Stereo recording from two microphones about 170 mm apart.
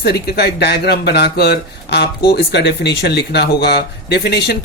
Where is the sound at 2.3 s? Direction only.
85° left.